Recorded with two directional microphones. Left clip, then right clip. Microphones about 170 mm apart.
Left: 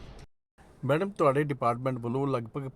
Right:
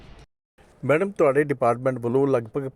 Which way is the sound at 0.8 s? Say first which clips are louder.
Right 6 dB; 15° right (ahead or behind).